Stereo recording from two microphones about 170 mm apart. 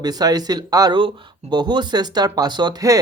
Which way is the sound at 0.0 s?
25° right (ahead or behind).